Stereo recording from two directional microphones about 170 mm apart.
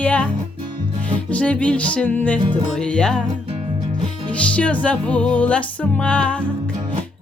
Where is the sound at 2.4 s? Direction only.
25° right (ahead or behind).